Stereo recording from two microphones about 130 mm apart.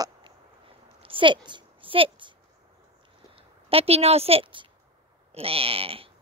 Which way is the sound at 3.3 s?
50° right (ahead or behind).